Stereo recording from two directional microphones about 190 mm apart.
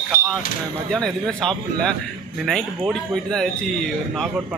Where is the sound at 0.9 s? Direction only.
5° left (ahead or behind).